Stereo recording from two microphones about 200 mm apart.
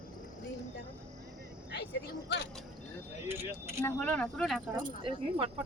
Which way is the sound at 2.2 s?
60° left (ahead or behind).